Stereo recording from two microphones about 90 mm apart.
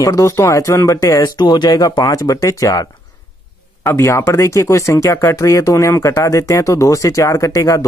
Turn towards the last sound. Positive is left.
turn(degrees=40)  # may be behind; listen again after turning